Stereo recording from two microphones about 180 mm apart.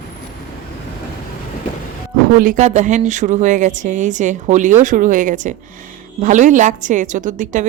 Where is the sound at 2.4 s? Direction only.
45° right (ahead or behind).